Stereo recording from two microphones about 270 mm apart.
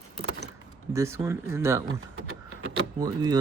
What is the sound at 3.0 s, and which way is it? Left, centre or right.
Speech, centre.